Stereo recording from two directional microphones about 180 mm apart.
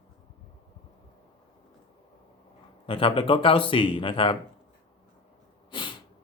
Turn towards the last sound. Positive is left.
turn(degrees=25)  # may be behind; listen again after turning